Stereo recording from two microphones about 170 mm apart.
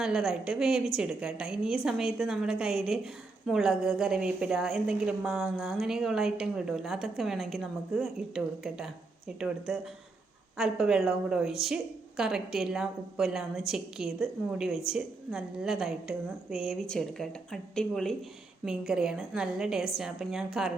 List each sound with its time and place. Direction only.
0.0 s a woman's voice: centre (ahead or behind)